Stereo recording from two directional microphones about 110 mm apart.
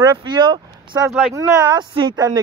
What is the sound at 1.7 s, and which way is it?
Speech, 40° right (ahead or behind).